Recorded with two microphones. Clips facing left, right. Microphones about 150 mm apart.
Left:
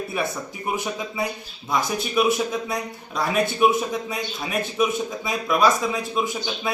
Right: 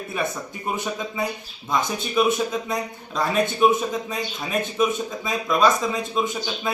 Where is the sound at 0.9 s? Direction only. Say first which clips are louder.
Even; 10° left (ahead or behind).